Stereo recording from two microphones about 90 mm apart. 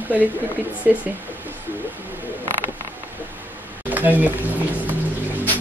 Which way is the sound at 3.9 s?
20° right (ahead or behind).